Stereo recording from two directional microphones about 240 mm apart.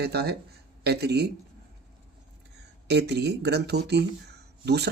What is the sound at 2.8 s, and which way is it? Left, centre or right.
Speech, right.